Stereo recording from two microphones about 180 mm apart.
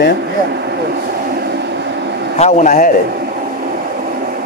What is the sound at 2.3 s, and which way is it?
Speech, 40° left (ahead or behind).